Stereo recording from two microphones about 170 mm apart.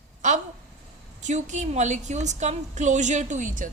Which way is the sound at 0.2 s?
45° right (ahead or behind).